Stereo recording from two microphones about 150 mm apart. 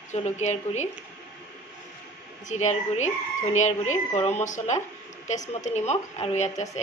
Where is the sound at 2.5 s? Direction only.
50° left (ahead or behind).